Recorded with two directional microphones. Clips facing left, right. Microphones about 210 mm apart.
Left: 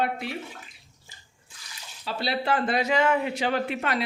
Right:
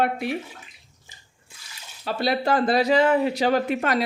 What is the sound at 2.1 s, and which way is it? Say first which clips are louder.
Speech: right 4 dB; 50° right (ahead or behind).